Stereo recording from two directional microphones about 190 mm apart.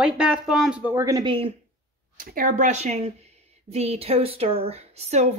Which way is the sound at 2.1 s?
45° right (ahead or behind).